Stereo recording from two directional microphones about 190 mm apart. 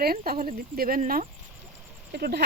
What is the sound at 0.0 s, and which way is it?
Speech, 50° right (ahead or behind).